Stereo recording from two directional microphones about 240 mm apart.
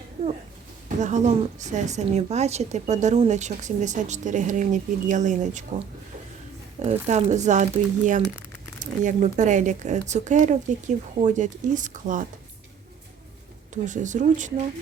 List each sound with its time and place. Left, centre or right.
0.9 s a woman's voice: right
6.8 s a woman's voice: right
13.8 s a woman's voice: right